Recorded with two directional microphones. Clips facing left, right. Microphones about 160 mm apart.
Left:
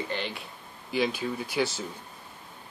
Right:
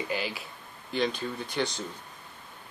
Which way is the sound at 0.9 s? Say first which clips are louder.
Left 2 dB; 5° left (ahead or behind).